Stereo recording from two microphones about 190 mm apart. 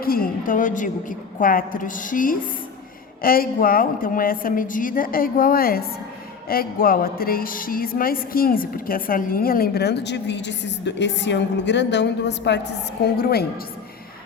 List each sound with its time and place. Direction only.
0.0 s a woman's voice: 50° left (ahead or behind); by 12.5 s 65° left (ahead or behind)
13.1 s a woman's voice: 55° left (ahead or behind)